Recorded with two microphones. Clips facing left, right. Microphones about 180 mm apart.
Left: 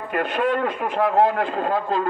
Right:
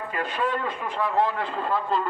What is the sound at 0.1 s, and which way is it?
A man's voice, 60° left (ahead or behind).